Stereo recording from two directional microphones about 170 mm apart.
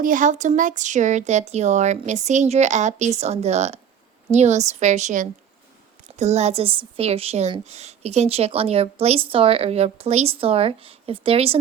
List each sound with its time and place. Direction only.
0.0 s speech: 50° right (ahead or behind); by 11.5 s 35° right (ahead or behind)